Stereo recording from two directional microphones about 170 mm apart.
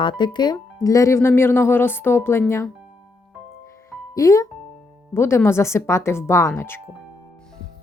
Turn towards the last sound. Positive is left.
turn(degrees=15)  # may be behind; listen again after turning